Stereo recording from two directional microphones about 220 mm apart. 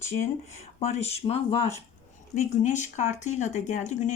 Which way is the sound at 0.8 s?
30° left (ahead or behind).